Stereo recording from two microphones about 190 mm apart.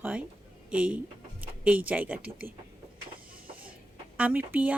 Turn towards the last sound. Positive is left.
turn(degrees=-10)  # may be behind; listen again after turning